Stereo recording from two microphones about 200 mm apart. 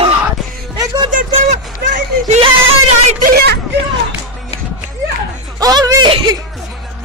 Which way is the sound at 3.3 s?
50° right (ahead or behind).